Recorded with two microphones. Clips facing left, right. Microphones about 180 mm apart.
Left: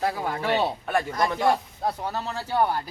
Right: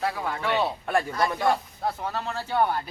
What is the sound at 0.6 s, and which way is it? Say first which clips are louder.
Speech: even; 15° left (ahead or behind).